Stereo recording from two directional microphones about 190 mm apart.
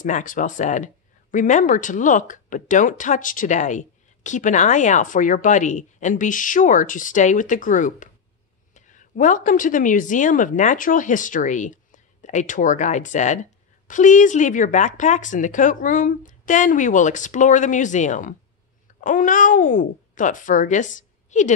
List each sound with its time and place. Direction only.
0.0 s a woman's voice: 45° left (ahead or behind)